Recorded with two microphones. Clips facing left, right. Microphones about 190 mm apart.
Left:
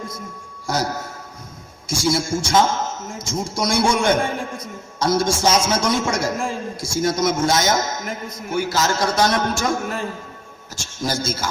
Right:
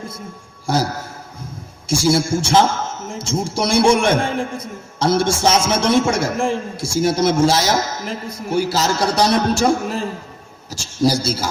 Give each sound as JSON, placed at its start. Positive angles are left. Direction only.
{"t": 0.7, "sound": "a man's voice", "side_deg": -30}